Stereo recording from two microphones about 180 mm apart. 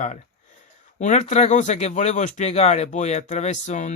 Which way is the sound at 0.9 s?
40° left (ahead or behind).